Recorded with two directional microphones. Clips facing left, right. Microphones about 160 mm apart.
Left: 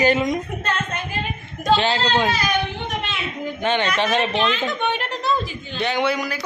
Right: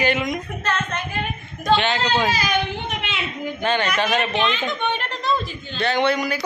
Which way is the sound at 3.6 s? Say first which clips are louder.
Left 1 dB; 20° left (ahead or behind).